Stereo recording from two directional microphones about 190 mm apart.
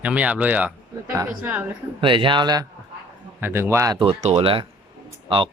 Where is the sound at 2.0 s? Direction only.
25° right (ahead or behind).